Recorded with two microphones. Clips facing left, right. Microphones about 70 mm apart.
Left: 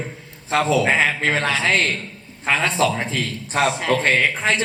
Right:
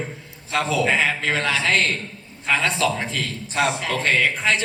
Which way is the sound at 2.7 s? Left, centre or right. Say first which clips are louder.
Left 3 dB; left.